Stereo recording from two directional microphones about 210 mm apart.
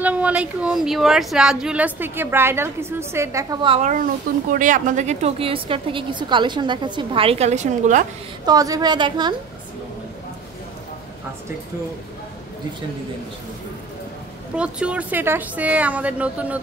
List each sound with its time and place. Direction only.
0.0 s speech: 5° right (ahead or behind); by 3.9 s 25° right (ahead or behind)
3.9 s a woman's voice: 40° right (ahead or behind)
8.5 s a woman's voice: 15° right (ahead or behind)
14.5 s speech: 5° right (ahead or behind)